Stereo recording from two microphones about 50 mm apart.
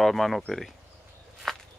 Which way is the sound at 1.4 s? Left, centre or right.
Centre.